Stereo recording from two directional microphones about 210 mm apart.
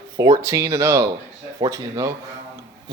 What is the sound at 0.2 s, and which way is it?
Speech, 15° right (ahead or behind).